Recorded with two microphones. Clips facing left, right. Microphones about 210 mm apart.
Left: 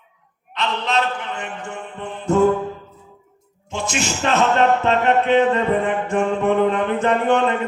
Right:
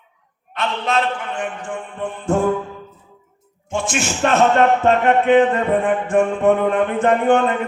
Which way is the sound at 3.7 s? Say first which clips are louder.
Right 2 dB; 50° right (ahead or behind).